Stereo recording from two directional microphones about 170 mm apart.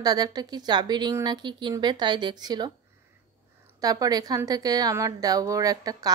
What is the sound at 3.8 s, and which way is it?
A woman's voice, 20° right (ahead or behind).